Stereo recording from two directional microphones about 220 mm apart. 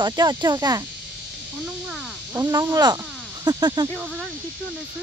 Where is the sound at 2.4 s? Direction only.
20° right (ahead or behind).